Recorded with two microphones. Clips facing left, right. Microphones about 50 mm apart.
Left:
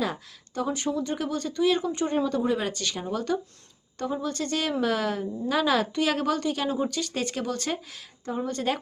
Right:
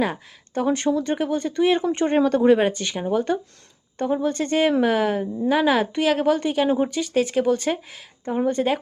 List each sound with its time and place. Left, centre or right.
0.0 s speech: right
0.6 s speech: right
1.0 s a woman's voice: right
2.1 s speech: right
2.6 s a woman's voice: right
6.0 s speech: centre
6.7 s a woman's voice: right
7.0 s speech: centre
8.3 s a woman's voice: right